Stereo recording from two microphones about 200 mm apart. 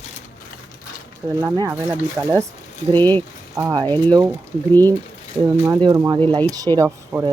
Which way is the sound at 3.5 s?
15° right (ahead or behind).